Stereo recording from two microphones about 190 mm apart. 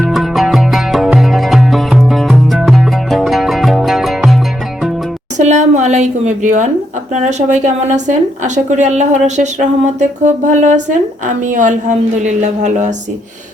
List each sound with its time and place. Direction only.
0.0 s music: centre (ahead or behind)
5.4 s a sound: 40° right (ahead or behind)
7.1 s speech: 40° right (ahead or behind)